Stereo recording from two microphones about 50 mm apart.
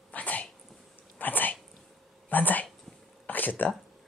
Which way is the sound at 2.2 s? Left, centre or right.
Left.